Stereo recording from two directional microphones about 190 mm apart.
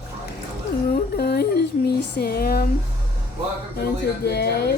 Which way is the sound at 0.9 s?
55° left (ahead or behind).